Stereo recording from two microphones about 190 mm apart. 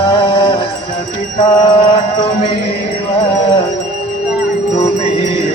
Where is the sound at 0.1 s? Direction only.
25° left (ahead or behind).